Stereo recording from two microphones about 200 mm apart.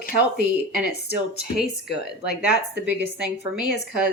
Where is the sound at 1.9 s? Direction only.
55° left (ahead or behind).